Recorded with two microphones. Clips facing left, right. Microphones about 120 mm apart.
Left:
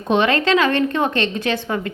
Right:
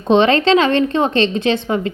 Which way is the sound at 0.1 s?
25° right (ahead or behind).